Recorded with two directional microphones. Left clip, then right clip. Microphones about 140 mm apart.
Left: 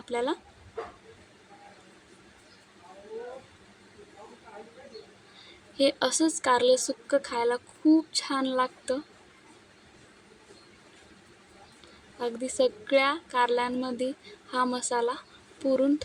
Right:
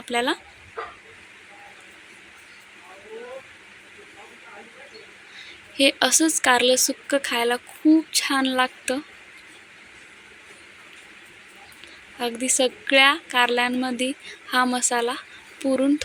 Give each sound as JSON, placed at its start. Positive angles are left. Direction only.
{"t": 0.1, "sound": "a woman's voice", "side_deg": -15}
{"t": 5.7, "sound": "a woman's voice", "side_deg": -15}
{"t": 12.2, "sound": "a woman's voice", "side_deg": -15}
{"t": 15.1, "sound": "a sound", "side_deg": -15}